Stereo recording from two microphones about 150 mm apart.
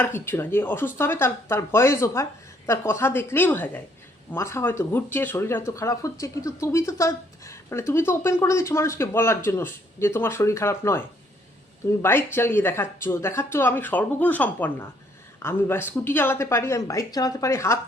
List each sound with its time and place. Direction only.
0.0 s speech: 15° left (ahead or behind)
12.0 s speech: 15° left (ahead or behind)